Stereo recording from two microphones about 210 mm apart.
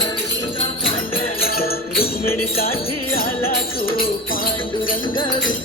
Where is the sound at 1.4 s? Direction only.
45° left (ahead or behind).